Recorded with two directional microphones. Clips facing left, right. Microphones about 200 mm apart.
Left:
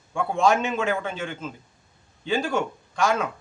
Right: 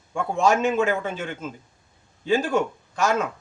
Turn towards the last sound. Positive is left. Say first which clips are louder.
# right 1 dB
turn(degrees=-5)  # may be behind; listen again after turning